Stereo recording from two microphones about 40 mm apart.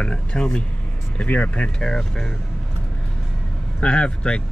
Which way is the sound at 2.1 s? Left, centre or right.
Centre.